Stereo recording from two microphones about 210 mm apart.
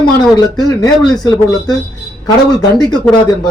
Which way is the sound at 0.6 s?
20° left (ahead or behind).